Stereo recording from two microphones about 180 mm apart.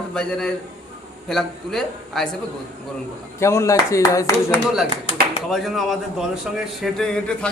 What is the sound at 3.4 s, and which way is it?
Speech, 15° left (ahead or behind).